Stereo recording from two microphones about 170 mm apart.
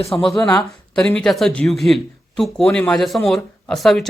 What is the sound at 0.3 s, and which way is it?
Speech, 20° left (ahead or behind).